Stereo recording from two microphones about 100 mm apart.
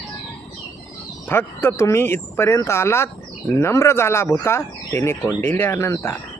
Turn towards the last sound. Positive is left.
turn(degrees=25)  # may be behind; listen again after turning